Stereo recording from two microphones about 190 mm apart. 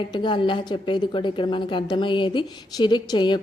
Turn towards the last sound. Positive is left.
turn(degrees=25)  # may be behind; listen again after turning